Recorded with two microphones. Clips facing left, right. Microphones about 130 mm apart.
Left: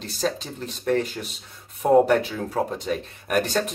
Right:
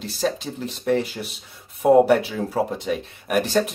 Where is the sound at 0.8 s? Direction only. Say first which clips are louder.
Right 1 dB; 5° right (ahead or behind).